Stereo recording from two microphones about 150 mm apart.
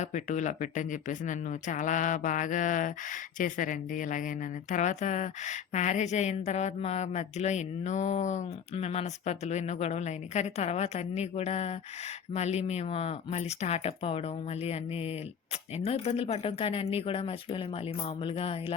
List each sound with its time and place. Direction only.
0.0 s speech: 55° left (ahead or behind); by 18.6 s 40° left (ahead or behind)